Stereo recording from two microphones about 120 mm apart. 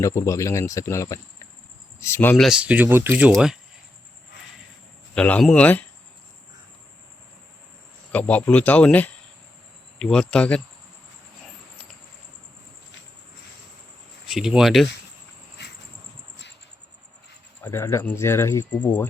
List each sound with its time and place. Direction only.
0.0 s speech: 25° left (ahead or behind)
2.3 s speech: centre (ahead or behind)
2.6 s speech: 10° right (ahead or behind)
5.1 s speech: 10° left (ahead or behind)
8.1 s speech: 10° left (ahead or behind)
14.3 s speech: 5° right (ahead or behind)
17.6 s speech: 20° left (ahead or behind)